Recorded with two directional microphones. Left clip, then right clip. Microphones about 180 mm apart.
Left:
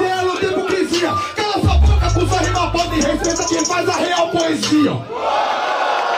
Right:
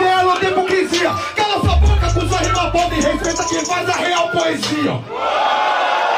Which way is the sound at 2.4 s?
Centre (ahead or behind).